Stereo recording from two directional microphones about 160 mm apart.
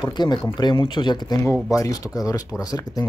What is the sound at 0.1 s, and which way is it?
Speech, 25° left (ahead or behind).